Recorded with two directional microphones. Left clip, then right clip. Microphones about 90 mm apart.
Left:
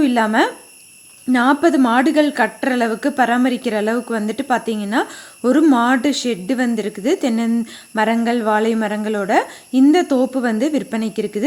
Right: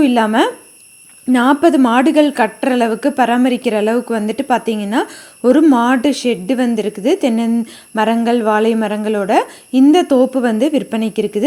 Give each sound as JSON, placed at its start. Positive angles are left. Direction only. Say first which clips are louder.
{"t": 0.0, "sound": "a woman's voice", "louder": "right 3 dB", "side_deg": -30}